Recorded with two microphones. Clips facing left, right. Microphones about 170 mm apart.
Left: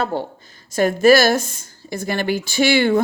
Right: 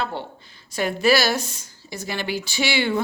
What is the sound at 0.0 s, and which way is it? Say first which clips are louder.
Speech: left 6 dB; 40° left (ahead or behind).